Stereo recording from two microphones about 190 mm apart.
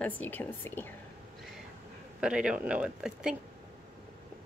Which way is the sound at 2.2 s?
5° right (ahead or behind).